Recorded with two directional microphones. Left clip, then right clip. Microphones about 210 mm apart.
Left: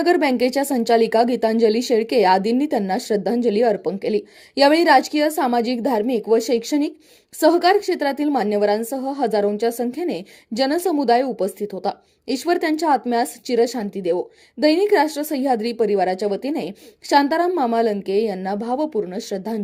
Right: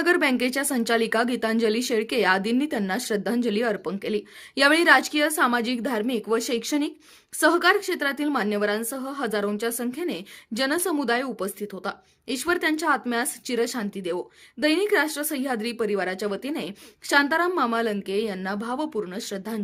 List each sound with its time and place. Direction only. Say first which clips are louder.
0.0 s a woman's voice: left 4 dB; 15° left (ahead or behind)